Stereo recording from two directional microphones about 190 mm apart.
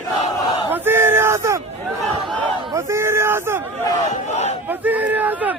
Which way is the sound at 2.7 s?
15° right (ahead or behind).